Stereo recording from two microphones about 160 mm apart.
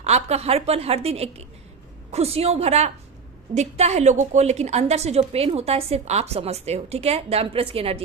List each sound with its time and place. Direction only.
0.0 s a woman's voice: 40° right (ahead or behind)